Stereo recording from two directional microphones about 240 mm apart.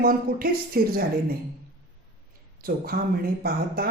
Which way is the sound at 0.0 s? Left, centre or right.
Right.